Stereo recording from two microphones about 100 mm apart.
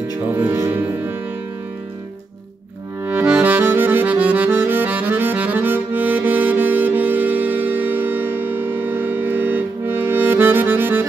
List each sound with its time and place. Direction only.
0.3 s music: 20° right (ahead or behind)
3.1 s accordion: 15° right (ahead or behind)